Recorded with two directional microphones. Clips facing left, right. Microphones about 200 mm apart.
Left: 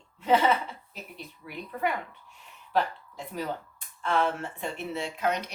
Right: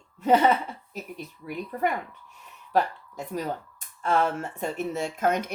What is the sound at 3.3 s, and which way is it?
Speech, 45° right (ahead or behind).